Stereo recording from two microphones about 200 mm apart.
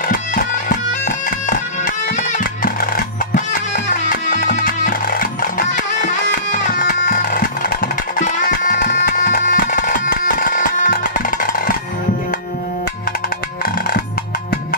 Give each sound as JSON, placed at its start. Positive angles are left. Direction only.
{"t": 0.7, "sound": "music", "side_deg": 40}
{"t": 4.3, "sound": "music", "side_deg": 40}